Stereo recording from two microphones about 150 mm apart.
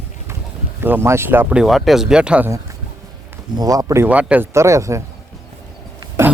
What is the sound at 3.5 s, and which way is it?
Speech, 25° right (ahead or behind).